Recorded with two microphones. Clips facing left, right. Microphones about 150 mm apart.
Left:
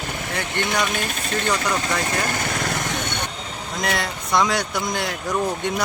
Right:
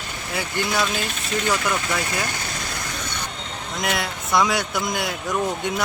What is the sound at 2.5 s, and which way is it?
Lawn mower, 75° left (ahead or behind).